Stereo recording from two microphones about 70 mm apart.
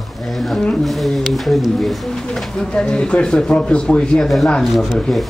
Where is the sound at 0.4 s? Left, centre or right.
Centre.